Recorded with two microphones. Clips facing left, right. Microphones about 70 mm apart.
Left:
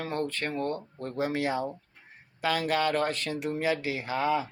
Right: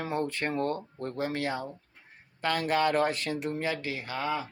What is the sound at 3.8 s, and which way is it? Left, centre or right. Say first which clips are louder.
Speech: left 4 dB; centre.